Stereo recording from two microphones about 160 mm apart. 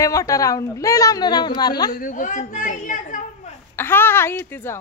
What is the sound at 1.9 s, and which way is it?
A woman's voice, 55° left (ahead or behind).